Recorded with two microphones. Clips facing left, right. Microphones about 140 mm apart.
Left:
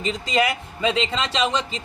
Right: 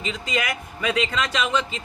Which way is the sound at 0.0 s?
35° left (ahead or behind).